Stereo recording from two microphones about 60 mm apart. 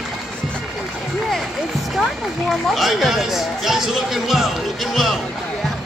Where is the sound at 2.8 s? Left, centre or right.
Centre.